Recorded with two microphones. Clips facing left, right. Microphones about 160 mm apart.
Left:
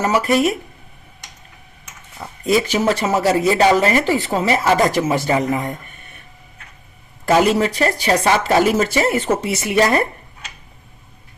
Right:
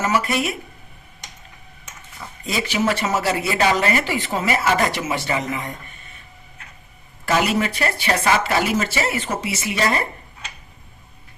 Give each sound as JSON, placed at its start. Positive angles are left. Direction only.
{"t": 0.0, "sound": "speech", "side_deg": 40}
{"t": 2.4, "sound": "speech", "side_deg": 45}
{"t": 2.8, "sound": "speech", "side_deg": 35}
{"t": 5.1, "sound": "speech", "side_deg": 45}
{"t": 7.3, "sound": "speech", "side_deg": 35}